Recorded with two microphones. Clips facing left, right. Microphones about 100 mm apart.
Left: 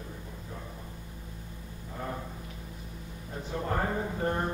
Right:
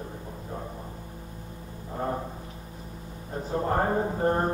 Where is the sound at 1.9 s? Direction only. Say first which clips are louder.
Right 7 dB; 35° right (ahead or behind).